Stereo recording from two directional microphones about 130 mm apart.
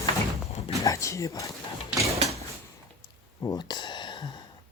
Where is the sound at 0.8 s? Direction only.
25° left (ahead or behind).